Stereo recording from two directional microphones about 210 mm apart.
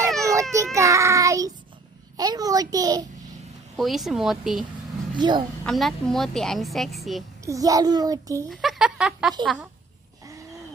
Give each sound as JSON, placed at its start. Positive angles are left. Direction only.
{"t": 0.2, "sound": "a sound", "side_deg": -15}
{"t": 0.5, "sound": "a child's voice", "side_deg": -15}
{"t": 3.8, "sound": "a woman's voice", "side_deg": 0}
{"t": 5.1, "sound": "a woman's voice", "side_deg": -20}
{"t": 5.6, "sound": "a woman's voice", "side_deg": 0}
{"t": 7.4, "sound": "a child's voice", "side_deg": -15}
{"t": 8.4, "sound": "a sound", "side_deg": 0}
{"t": 9.4, "sound": "a woman's voice", "side_deg": 0}